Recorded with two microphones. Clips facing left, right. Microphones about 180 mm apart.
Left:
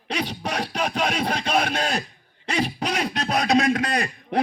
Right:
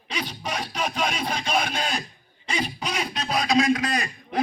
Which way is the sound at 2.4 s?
65° left (ahead or behind).